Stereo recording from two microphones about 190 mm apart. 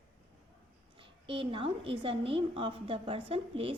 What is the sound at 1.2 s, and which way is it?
A woman's voice, 30° right (ahead or behind).